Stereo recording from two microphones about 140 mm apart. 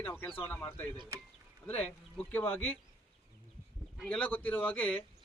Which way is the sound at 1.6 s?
10° left (ahead or behind).